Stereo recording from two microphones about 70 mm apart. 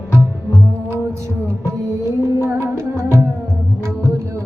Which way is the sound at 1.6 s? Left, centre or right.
Right.